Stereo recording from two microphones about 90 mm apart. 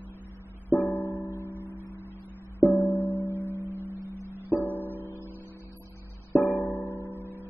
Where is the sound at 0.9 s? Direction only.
25° left (ahead or behind).